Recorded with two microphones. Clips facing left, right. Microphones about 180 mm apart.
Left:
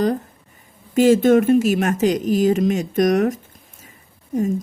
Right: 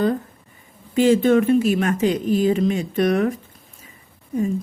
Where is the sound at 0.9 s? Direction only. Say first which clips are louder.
Left 2 dB; 45° left (ahead or behind).